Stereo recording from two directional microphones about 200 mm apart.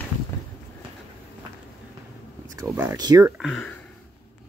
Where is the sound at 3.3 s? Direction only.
Centre (ahead or behind).